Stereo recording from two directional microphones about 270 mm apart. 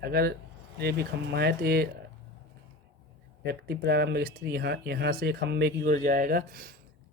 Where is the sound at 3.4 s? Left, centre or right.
Right.